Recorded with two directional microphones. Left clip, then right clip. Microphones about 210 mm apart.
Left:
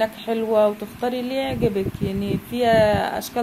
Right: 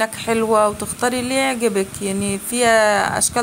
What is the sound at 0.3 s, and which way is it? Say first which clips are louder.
Speech: right 3 dB; 20° right (ahead or behind).